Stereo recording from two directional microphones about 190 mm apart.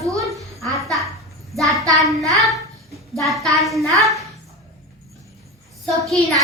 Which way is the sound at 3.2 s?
Centre (ahead or behind).